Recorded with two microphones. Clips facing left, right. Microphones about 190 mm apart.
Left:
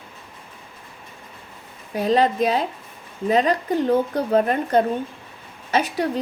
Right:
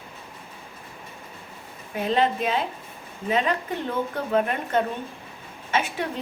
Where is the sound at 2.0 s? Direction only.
40° left (ahead or behind).